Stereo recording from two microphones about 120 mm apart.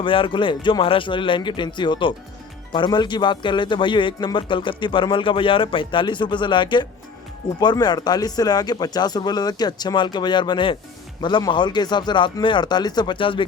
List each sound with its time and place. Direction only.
0.0 s a man's voice: 45° left (ahead or behind)